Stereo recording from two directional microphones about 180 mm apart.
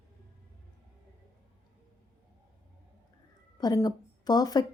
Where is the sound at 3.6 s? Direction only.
20° left (ahead or behind).